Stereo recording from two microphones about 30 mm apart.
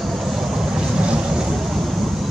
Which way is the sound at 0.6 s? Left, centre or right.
Right.